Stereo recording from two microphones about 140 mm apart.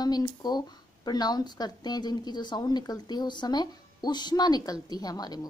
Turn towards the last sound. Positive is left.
turn(degrees=30)  # may be behind; listen again after turning